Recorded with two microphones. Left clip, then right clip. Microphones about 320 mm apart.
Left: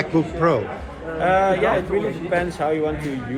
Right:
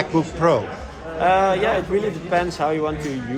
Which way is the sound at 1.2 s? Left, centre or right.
Right.